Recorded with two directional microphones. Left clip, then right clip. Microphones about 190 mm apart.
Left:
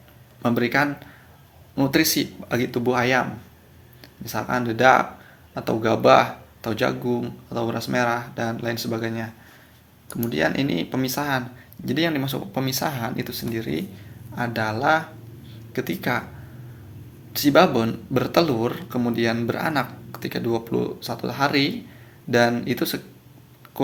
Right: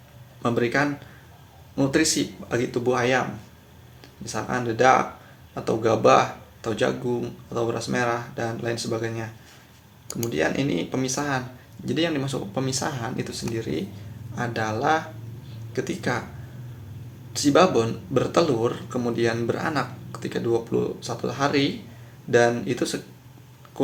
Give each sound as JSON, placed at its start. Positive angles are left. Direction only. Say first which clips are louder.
{"t": 0.4, "sound": "speech", "louder": "left 2 dB", "side_deg": 40}
{"t": 10.2, "sound": "speech", "louder": "left 1 dB", "side_deg": 35}
{"t": 17.3, "sound": "speech", "louder": "left 1 dB", "side_deg": 35}
{"t": 23.8, "sound": "a sound", "louder": "left 1 dB", "side_deg": 35}